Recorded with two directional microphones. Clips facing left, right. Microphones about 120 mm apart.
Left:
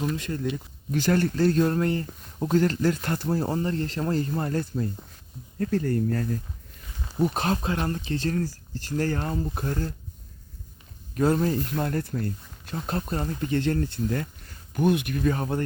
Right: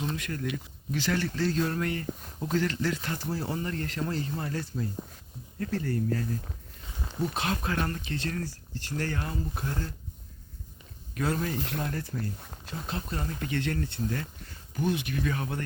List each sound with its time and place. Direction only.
0.2 s speech: 25° left (ahead or behind)
0.9 s speech: 45° left (ahead or behind)
7.6 s speech: 25° left (ahead or behind); by 9.9 s 45° left (ahead or behind)
11.2 s speech: 40° left (ahead or behind)
11.8 s speech: 50° left (ahead or behind)
12.9 s speech: 40° left (ahead or behind)
14.7 s speech: 55° left (ahead or behind); by 15.6 s 35° left (ahead or behind)